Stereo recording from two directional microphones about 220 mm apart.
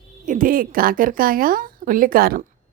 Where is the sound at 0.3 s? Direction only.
40° right (ahead or behind).